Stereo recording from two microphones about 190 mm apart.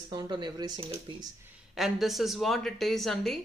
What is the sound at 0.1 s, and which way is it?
Speech, 20° right (ahead or behind).